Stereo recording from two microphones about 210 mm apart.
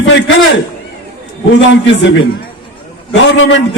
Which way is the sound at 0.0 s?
65° left (ahead or behind).